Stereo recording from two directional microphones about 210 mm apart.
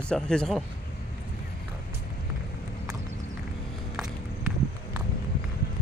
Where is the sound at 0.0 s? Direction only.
5° left (ahead or behind).